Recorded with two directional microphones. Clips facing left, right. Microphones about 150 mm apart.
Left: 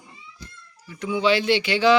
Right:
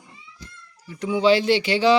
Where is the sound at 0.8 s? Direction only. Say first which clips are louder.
Right 3 dB; 35° right (ahead or behind).